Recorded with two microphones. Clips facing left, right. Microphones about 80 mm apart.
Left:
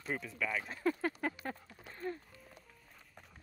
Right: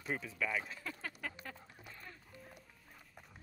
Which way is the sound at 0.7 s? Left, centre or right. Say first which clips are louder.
Left 11 dB; left.